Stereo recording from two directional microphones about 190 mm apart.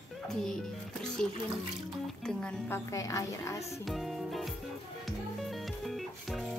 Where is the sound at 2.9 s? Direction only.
15° left (ahead or behind).